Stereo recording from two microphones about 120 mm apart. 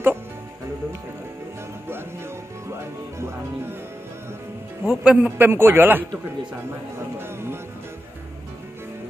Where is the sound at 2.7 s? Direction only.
20° right (ahead or behind).